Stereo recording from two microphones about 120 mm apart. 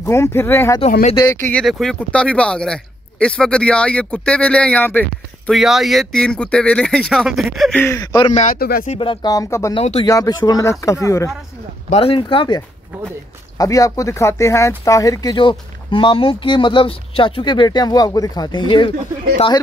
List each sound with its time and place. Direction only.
0.0 s speech: 25° left (ahead or behind)
1.5 s speech: 5° left (ahead or behind)
5.5 s speech: centre (ahead or behind)
7.9 s speech: 35° left (ahead or behind)
8.4 s speech: 75° left (ahead or behind)
9.0 s speech: 40° left (ahead or behind)
9.3 s speech: 25° left (ahead or behind)
9.8 s speech: 55° left (ahead or behind)
10.0 s speech: 30° left (ahead or behind)
11.9 s speech: 50° left (ahead or behind)
12.9 s speech: 10° right (ahead or behind)
13.6 s speech: 30° left (ahead or behind)